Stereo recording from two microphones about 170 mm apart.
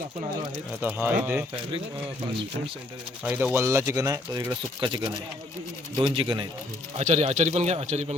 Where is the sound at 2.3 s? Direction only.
30° right (ahead or behind).